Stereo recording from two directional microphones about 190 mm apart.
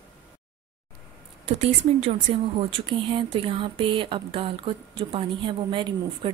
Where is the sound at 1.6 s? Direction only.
30° right (ahead or behind).